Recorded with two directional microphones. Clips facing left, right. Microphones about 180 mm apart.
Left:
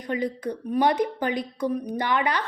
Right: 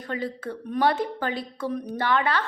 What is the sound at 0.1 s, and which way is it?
A woman's voice, 15° left (ahead or behind).